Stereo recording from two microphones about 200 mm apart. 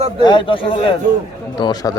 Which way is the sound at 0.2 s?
20° left (ahead or behind).